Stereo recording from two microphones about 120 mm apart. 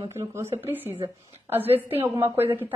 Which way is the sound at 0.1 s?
20° right (ahead or behind).